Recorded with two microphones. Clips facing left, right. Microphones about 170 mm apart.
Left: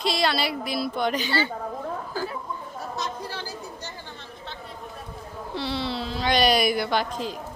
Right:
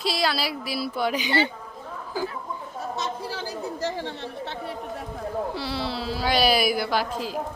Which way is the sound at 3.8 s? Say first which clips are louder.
Right 11 dB; 90° right.